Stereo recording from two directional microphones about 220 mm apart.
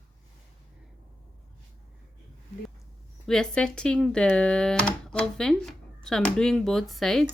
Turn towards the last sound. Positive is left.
turn(degrees=0)  # may be behind; listen again after turning